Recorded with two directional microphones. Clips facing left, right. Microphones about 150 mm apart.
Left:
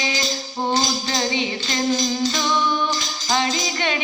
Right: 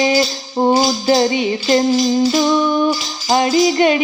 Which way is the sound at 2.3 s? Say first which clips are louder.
Right 8 dB; 45° right (ahead or behind).